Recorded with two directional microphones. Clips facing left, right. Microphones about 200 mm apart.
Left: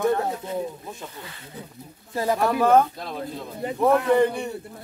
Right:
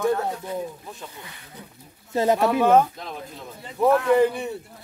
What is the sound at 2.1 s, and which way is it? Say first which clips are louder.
Speech: right 3 dB; 20° right (ahead or behind).